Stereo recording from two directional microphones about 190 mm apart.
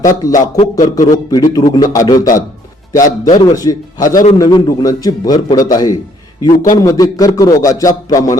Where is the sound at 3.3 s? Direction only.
20° left (ahead or behind).